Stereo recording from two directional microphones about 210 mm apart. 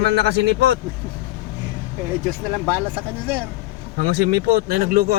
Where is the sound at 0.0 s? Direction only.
55° right (ahead or behind).